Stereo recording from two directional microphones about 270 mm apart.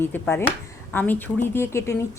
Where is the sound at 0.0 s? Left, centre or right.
Centre.